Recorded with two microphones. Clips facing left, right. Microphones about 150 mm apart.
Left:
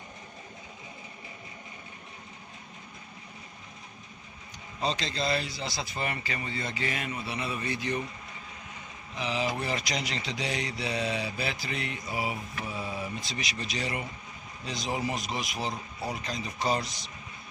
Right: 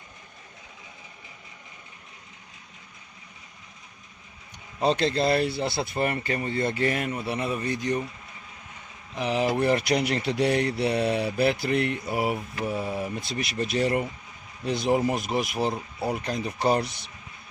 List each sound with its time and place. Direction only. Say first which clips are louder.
4.8 s speech: right 8 dB; 60° right (ahead or behind); by 8.0 s 45° right (ahead or behind)
9.1 s speech: right 6 dB; 55° right (ahead or behind)